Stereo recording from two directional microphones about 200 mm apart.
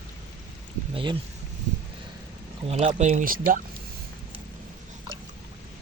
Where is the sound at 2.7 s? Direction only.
35° right (ahead or behind).